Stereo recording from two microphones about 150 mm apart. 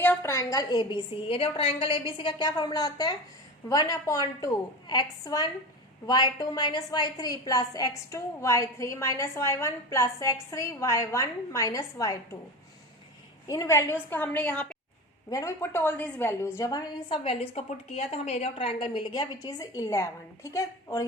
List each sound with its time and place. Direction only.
0.0 s a woman's voice: 15° left (ahead or behind)
13.5 s a woman's voice: 20° left (ahead or behind)
15.3 s a woman's voice: 20° left (ahead or behind)